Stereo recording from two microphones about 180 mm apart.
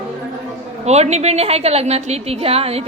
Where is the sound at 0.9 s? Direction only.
35° right (ahead or behind).